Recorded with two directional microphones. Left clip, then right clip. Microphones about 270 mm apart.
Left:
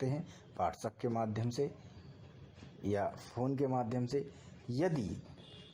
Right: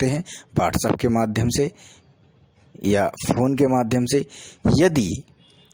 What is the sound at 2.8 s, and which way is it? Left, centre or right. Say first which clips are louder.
Speech: right 16 dB; right.